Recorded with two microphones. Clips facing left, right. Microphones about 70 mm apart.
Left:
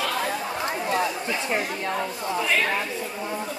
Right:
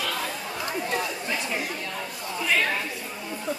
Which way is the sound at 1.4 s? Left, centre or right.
Left.